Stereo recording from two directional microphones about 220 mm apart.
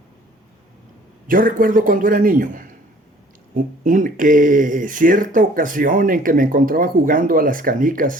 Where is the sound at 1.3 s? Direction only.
40° right (ahead or behind).